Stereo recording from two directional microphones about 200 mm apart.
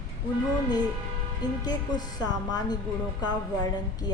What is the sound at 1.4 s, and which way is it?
Speech, 20° left (ahead or behind).